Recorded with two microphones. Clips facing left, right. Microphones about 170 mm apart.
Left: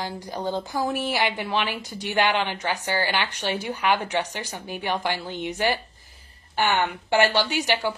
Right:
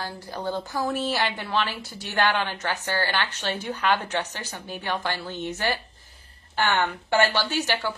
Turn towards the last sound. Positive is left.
turn(degrees=15)  # may be behind; listen again after turning